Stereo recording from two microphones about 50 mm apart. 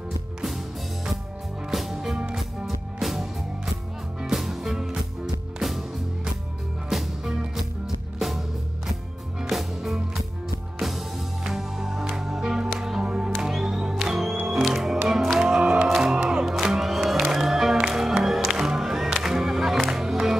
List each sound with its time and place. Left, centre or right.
1.7 s music: centre
6.9 s music: centre
9.4 s music: centre